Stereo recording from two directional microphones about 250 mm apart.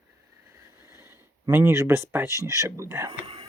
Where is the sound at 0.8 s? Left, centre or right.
Centre.